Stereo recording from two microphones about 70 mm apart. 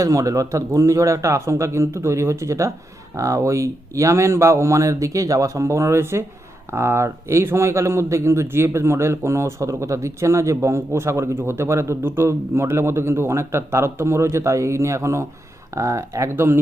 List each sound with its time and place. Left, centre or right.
0.0 s speech: right
16.3 s speech: right